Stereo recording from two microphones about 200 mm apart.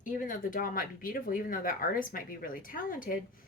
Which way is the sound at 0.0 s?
40° left (ahead or behind).